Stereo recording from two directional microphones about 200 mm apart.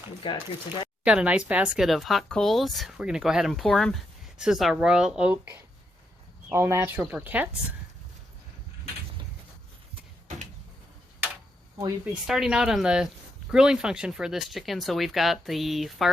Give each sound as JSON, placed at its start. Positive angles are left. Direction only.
{"t": 0.2, "sound": "speech", "side_deg": 25}
{"t": 1.0, "sound": "speech", "side_deg": -5}
{"t": 12.2, "sound": "speech", "side_deg": 0}